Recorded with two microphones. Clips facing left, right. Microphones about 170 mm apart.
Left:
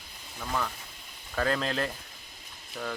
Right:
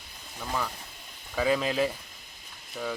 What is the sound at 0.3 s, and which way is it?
Speech, 5° right (ahead or behind).